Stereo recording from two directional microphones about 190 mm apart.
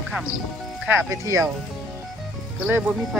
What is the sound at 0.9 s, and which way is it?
Speech, 15° right (ahead or behind).